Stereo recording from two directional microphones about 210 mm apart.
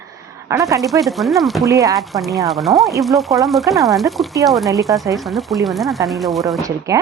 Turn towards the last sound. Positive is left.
turn(degrees=-15)  # may be behind; listen again after turning